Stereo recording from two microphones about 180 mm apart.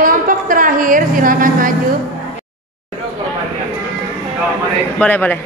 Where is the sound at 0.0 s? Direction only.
50° right (ahead or behind).